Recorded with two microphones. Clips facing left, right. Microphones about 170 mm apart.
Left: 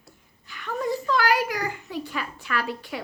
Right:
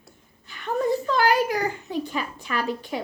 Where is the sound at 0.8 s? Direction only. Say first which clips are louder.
Right 2 dB; 25° right (ahead or behind).